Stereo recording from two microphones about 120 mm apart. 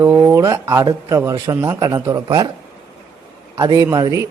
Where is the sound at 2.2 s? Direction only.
35° right (ahead or behind).